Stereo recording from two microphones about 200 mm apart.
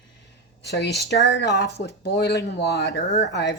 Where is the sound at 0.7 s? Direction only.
55° left (ahead or behind).